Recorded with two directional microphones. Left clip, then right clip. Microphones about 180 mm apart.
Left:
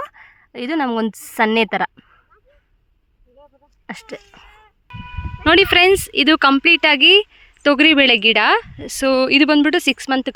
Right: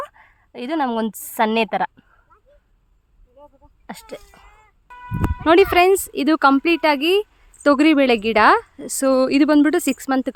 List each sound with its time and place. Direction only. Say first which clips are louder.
0.0 s a woman's voice: left 2 dB; 15° left (ahead or behind)
3.8 s speech: left 3 dB; 15° left (ahead or behind)
4.3 s throat clearing: left 3 dB; 10° left (ahead or behind)
5.4 s speech: left 2 dB; centre (ahead or behind)
7.6 s speech: left 3 dB; 10° right (ahead or behind)